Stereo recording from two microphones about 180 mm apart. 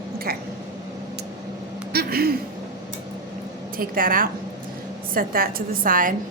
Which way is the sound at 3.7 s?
50° right (ahead or behind).